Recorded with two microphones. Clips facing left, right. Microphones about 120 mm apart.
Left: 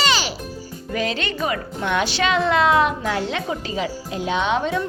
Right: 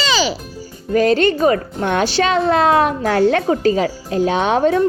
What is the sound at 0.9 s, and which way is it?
Speech, 45° right (ahead or behind).